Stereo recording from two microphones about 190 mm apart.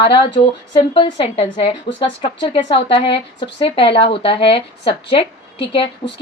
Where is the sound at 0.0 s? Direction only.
25° left (ahead or behind).